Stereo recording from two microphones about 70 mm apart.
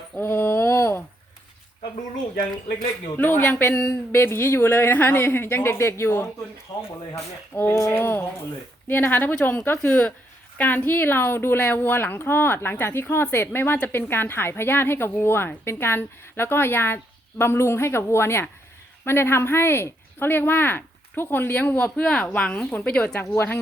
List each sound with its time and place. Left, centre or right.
0.2 s a sound: left
3.2 s a woman's voice: left
22.0 s speech: centre
23.2 s speech: left